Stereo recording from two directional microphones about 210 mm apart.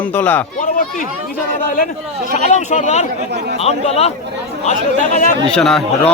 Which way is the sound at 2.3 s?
35° left (ahead or behind).